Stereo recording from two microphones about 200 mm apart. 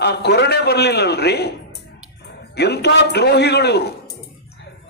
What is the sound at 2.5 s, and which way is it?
A man's voice, 55° left (ahead or behind).